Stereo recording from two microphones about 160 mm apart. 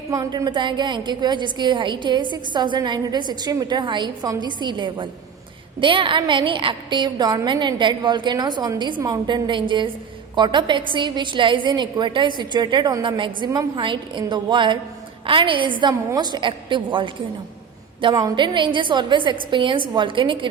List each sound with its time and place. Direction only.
0.1 s a woman's voice: 25° right (ahead or behind)